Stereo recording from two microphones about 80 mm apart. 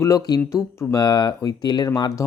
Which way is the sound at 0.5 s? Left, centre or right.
Left.